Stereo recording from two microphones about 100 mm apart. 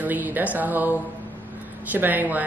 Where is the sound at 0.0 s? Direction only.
20° right (ahead or behind).